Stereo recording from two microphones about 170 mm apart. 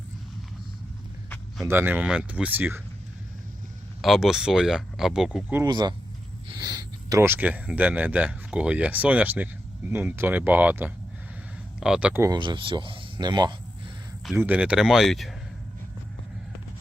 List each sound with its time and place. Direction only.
1.6 s speech: 10° right (ahead or behind)
4.0 s speech: centre (ahead or behind)
5.6 s speech: 25° right (ahead or behind)
12.3 s speech: 25° right (ahead or behind)
14.3 s speech: 10° right (ahead or behind)